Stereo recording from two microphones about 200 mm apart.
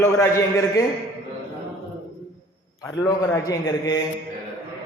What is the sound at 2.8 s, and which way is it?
A man's voice, 15° left (ahead or behind).